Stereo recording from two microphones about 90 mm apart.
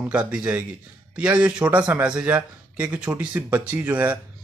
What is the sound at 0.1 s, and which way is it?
A man's voice, 15° right (ahead or behind).